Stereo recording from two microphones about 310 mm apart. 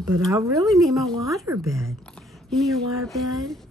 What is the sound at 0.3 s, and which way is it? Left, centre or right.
Speech, centre.